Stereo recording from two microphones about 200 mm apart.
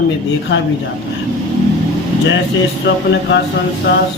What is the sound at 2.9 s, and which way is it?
Speech, 60° left (ahead or behind).